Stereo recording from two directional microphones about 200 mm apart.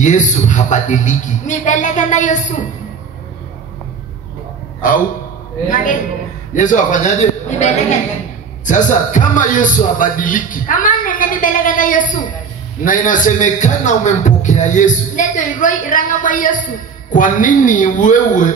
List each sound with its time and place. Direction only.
0.0 s a man's voice: 40° left (ahead or behind)
6.5 s a man's voice: 40° left (ahead or behind)